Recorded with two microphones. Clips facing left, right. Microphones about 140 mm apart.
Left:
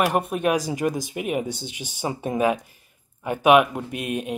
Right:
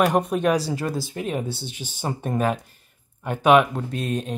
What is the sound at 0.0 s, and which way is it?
Speech, 10° left (ahead or behind).